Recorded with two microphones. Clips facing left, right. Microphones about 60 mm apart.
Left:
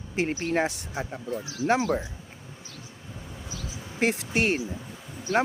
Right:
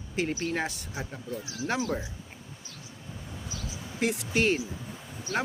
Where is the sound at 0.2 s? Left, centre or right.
Left.